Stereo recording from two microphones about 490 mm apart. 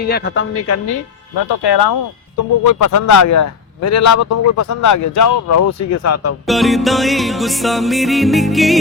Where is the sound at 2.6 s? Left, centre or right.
Left.